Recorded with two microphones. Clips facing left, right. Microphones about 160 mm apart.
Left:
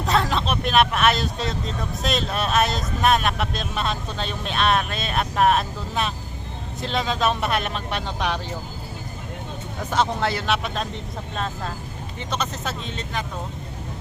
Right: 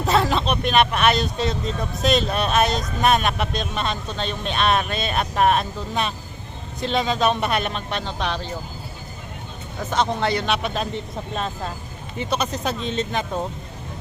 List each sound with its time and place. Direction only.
0.0 s speech: centre (ahead or behind)
9.9 s speech: 5° left (ahead or behind); by 13.4 s 25° right (ahead or behind)